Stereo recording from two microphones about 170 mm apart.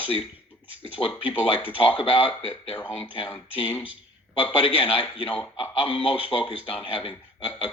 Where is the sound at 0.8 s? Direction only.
35° left (ahead or behind).